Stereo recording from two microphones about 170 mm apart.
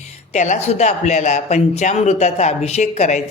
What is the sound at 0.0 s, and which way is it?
Speech, 45° left (ahead or behind).